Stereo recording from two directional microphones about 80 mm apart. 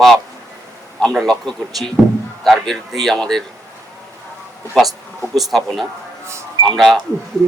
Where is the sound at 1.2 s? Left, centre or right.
Centre.